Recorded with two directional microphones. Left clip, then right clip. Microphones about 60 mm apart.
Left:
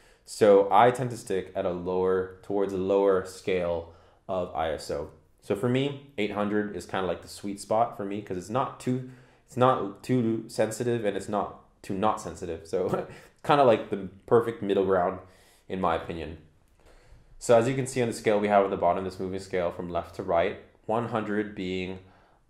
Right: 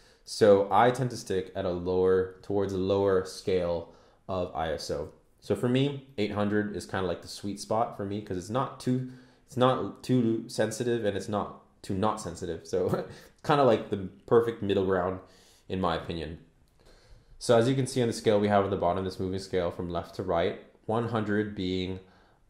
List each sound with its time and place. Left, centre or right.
0.4 s speech: centre
6.9 s speech: right
7.2 s speech: centre
13.1 s a sound: centre
13.7 s speech: centre
17.5 s speech: centre